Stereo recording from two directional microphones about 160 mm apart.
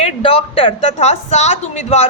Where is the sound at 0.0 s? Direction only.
35° left (ahead or behind).